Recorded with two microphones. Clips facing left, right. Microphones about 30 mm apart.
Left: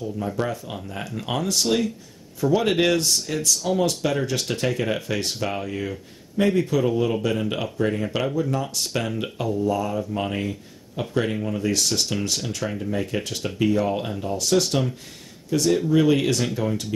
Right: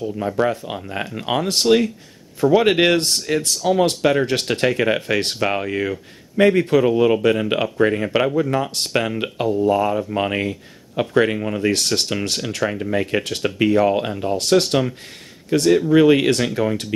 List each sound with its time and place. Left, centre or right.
0.0 s speech: right
3.3 s speech: right
8.9 s speech: right
13.6 s speech: right
14.3 s speech: right